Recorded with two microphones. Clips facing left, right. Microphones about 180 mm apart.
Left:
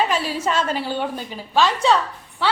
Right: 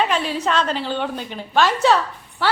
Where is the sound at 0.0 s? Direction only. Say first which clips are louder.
Right 1 dB; 5° left (ahead or behind).